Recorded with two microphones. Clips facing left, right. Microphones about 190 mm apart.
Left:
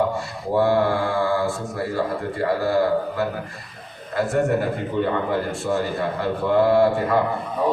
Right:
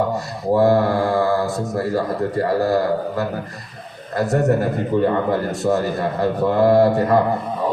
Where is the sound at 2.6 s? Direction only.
40° right (ahead or behind).